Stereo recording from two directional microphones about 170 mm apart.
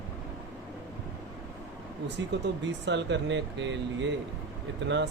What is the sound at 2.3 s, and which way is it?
Speech, 90° right.